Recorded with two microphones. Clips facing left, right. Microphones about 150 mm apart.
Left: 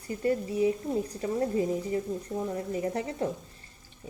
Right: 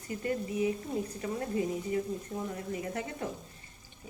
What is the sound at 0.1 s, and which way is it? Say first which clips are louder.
Speech: left 5 dB; 35° left (ahead or behind).